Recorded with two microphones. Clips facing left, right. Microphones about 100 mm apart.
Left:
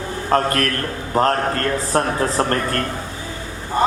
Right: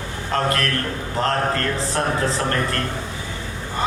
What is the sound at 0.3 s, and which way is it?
A man's voice, 45° left (ahead or behind).